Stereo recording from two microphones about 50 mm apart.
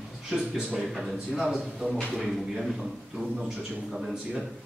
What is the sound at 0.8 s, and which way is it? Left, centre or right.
Speech, centre.